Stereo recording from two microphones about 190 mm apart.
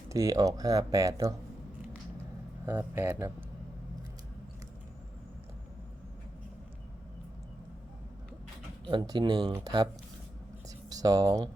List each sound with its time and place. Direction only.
0.1 s speech: 15° right (ahead or behind)
2.6 s speech: 10° right (ahead or behind)
8.9 s speech: 20° right (ahead or behind)
10.7 s a sound: 20° right (ahead or behind)